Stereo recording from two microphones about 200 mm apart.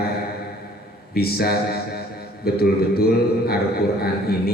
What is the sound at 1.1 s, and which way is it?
A man's voice, 50° left (ahead or behind).